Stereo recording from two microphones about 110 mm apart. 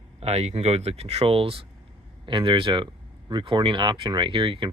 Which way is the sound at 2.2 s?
50° right (ahead or behind).